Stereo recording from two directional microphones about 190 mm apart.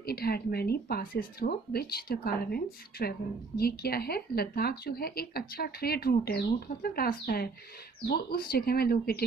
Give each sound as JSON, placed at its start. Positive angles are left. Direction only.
{"t": 0.0, "sound": "speech", "side_deg": 55}